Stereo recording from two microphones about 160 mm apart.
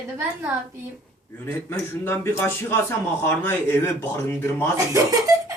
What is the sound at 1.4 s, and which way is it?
A man's voice, 15° left (ahead or behind).